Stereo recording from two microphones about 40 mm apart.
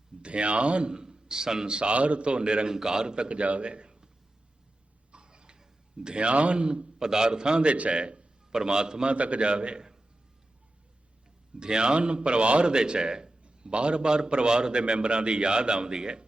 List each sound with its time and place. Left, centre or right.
0.2 s a man's voice: right
5.1 s a man's voice: right
7.7 s a man's voice: right
9.1 s a man's voice: right
11.6 s a man's voice: right